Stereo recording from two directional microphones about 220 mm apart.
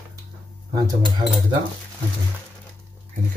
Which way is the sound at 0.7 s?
20° right (ahead or behind).